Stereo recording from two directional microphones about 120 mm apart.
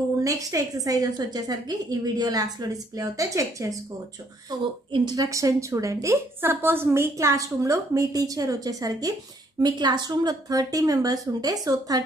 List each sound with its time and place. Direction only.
0.2 s a woman's voice: 30° right (ahead or behind)